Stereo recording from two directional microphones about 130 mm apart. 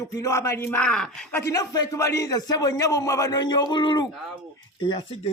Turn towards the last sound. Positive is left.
turn(degrees=35)  # may be behind; listen again after turning